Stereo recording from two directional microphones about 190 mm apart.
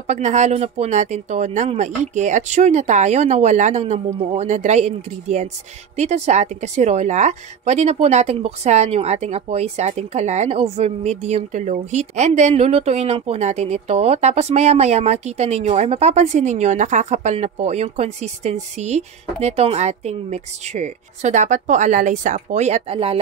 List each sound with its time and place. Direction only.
0.0 s a woman's voice: 40° right (ahead or behind)